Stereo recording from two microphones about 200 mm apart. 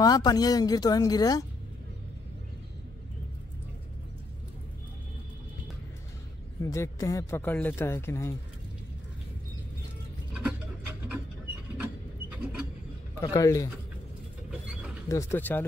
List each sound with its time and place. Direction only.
0.0 s speech: 20° left (ahead or behind)
6.6 s a man's voice: 15° left (ahead or behind)
11.8 s a sound: 5° right (ahead or behind)
13.2 s a man's voice: 15° left (ahead or behind)
15.0 s a man's voice: 15° left (ahead or behind)